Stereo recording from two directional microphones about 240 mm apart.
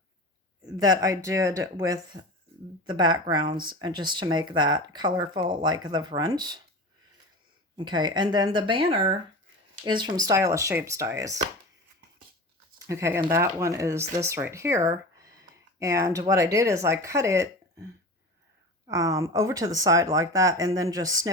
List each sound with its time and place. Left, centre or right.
0.6 s speech: centre
7.8 s speech: centre
12.9 s speech: centre
18.9 s speech: centre